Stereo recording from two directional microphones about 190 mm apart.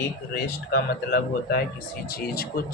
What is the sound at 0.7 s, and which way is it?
Speech, 55° left (ahead or behind).